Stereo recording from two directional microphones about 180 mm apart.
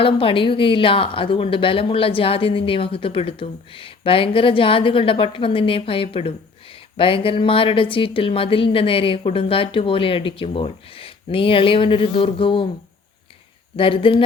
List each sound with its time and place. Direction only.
0.0 s a woman's voice: 30° left (ahead or behind)
13.7 s a woman's voice: 30° left (ahead or behind)